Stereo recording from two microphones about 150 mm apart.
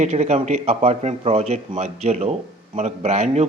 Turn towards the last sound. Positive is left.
turn(degrees=-50)  # may be behind; listen again after turning